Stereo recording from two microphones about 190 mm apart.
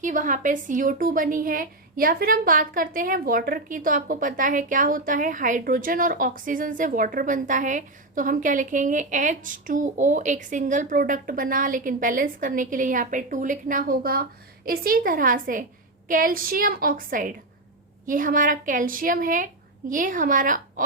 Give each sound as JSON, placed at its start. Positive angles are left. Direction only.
{"t": 0.0, "sound": "a woman's voice", "side_deg": -40}